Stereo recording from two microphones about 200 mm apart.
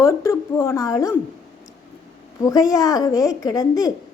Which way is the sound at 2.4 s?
15° left (ahead or behind).